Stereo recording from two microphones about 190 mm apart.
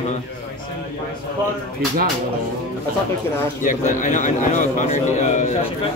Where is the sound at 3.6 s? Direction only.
40° left (ahead or behind).